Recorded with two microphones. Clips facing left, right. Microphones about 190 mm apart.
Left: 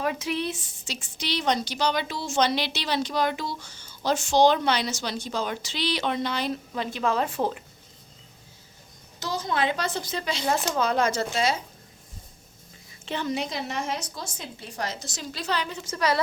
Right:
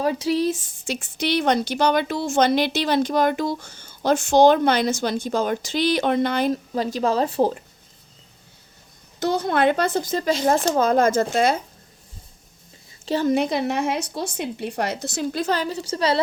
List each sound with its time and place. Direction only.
0.0 s a woman's voice: 35° right (ahead or behind)
9.2 s a woman's voice: 60° right (ahead or behind)
13.1 s a woman's voice: 40° right (ahead or behind)
13.3 s speech: 55° right (ahead or behind); by 16.2 s 30° right (ahead or behind)